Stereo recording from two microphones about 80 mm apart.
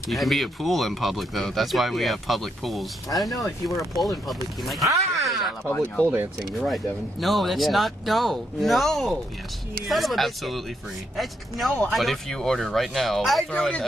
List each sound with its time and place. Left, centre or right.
0.1 s speech: centre
5.2 s a sound: centre
5.7 s speech: centre
6.6 s speech: centre